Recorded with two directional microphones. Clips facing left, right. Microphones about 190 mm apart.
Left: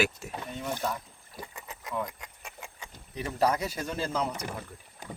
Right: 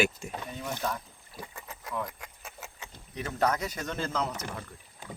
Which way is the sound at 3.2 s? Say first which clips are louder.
Left 1 dB; 10° left (ahead or behind).